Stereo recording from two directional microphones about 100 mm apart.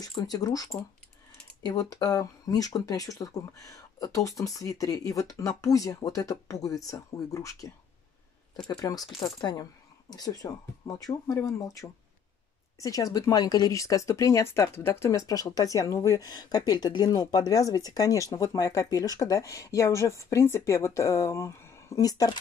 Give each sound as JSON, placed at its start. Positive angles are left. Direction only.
{"t": 0.0, "sound": "speech", "side_deg": 40}